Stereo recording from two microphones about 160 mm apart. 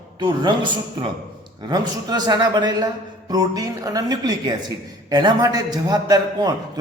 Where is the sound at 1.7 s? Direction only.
25° right (ahead or behind).